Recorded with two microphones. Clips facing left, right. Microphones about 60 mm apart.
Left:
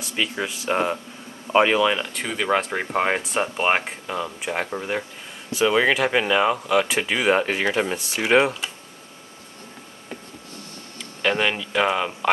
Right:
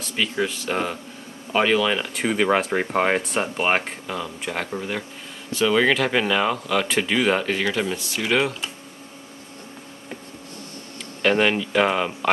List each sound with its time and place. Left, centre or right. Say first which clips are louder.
0.0 s speech: right 2 dB; centre
2.0 s speech: right 4 dB; centre
4.2 s speech: left 3 dB; centre
11.2 s speech: right 3 dB; centre